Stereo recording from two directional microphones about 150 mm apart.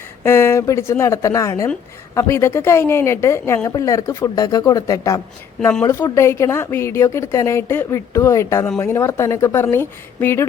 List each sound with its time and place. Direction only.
0.2 s speech: 15° left (ahead or behind)
5.5 s speech: 5° left (ahead or behind)
5.8 s a woman's voice: 20° left (ahead or behind)